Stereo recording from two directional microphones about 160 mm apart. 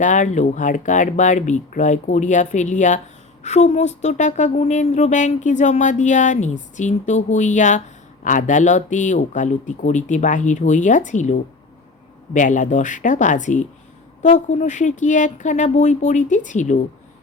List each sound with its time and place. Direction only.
0.0 s a woman's voice: 50° left (ahead or behind)